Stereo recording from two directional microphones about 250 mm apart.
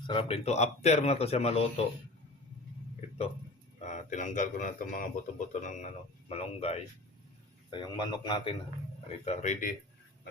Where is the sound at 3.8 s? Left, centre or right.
Left.